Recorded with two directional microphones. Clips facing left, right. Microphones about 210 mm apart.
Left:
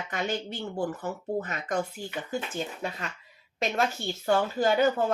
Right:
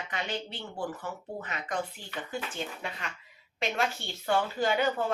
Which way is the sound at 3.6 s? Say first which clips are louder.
Left 3 dB; 40° left (ahead or behind).